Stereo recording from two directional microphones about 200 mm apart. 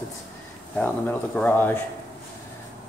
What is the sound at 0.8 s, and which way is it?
Speech, 10° left (ahead or behind).